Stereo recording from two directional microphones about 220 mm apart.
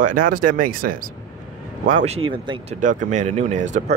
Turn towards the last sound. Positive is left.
turn(degrees=-35)  # may be behind; listen again after turning